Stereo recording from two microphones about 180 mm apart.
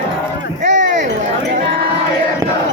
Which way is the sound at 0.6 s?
45° right (ahead or behind).